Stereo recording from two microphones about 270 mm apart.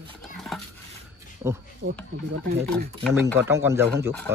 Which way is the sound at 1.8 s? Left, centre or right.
Right.